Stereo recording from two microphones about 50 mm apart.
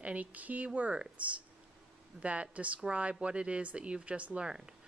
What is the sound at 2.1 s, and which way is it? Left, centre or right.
Speech, right.